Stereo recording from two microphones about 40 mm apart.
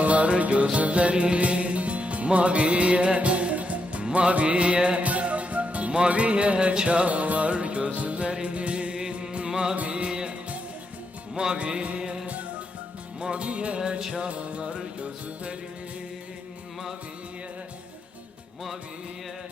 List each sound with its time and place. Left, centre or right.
0.0 s music: right; by 9.7 s centre
9.7 s music: right
11.3 s music: right
13.3 s music: right